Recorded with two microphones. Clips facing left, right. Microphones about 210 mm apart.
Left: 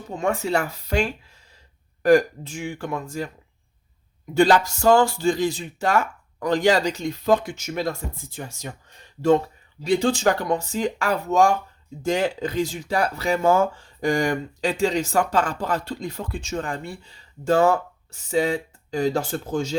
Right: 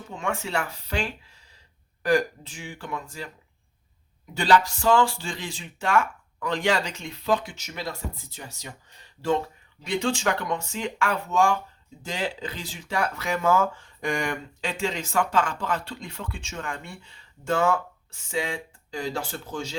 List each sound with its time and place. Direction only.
0.1 s speech: 40° left (ahead or behind)
4.4 s speech: 45° left (ahead or behind)
9.8 s speech: 35° left (ahead or behind)